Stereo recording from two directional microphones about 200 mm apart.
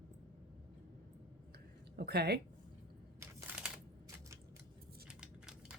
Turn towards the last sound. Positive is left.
turn(degrees=-5)  # may be behind; listen again after turning